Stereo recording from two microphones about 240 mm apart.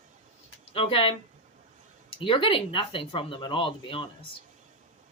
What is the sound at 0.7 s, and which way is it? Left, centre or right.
Speech, left.